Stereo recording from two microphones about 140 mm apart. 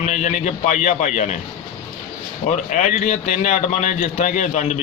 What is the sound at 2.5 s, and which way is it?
Speech, 65° left (ahead or behind).